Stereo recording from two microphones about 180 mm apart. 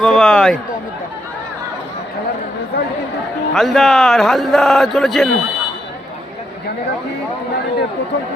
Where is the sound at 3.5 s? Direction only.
Centre (ahead or behind).